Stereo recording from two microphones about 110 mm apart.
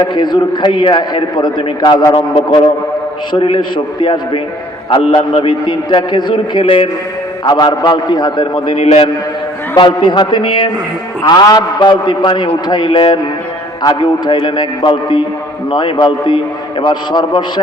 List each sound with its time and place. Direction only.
0.1 s a man's voice: 40° left (ahead or behind)
7.4 s a man's voice: 40° left (ahead or behind); by 9.0 s 60° left (ahead or behind)
9.7 s a man's voice: 45° left (ahead or behind)